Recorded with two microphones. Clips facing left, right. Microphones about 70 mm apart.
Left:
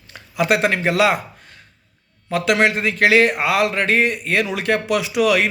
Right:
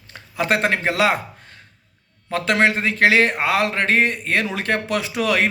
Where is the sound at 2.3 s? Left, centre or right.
Right.